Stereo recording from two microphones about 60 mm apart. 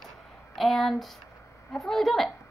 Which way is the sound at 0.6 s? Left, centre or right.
Centre.